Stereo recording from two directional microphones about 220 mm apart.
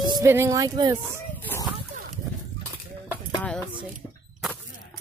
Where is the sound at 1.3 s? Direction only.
10° left (ahead or behind).